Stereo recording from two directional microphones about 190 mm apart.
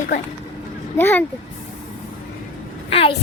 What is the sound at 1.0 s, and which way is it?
Speech, 10° left (ahead or behind).